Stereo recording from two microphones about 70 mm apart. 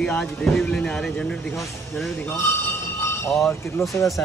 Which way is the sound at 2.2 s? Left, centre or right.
Left.